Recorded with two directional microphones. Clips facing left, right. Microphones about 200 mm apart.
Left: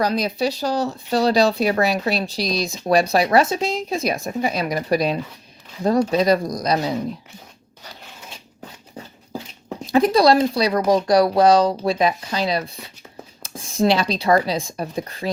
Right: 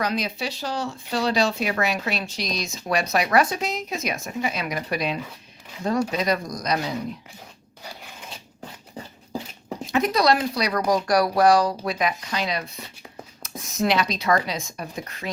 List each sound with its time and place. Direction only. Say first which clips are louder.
0.0 s speech: left 6 dB; 35° left (ahead or behind)
9.8 s speech: left 6 dB; 30° left (ahead or behind)